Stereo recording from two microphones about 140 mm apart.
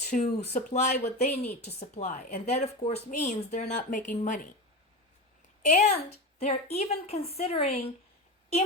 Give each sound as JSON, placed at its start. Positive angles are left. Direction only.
{"t": 0.0, "sound": "speech", "side_deg": 55}
{"t": 5.6, "sound": "a woman's voice", "side_deg": 55}